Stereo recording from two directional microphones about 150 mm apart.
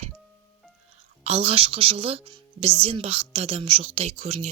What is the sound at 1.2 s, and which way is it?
A woman's voice, 45° right (ahead or behind).